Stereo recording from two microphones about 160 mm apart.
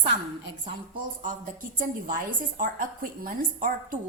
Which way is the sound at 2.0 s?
60° right (ahead or behind).